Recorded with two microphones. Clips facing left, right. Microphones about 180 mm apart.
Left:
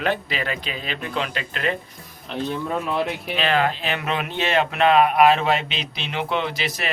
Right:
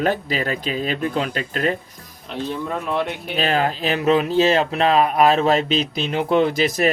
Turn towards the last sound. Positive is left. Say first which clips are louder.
# right 8 dB
turn(degrees=-45)  # may be behind; listen again after turning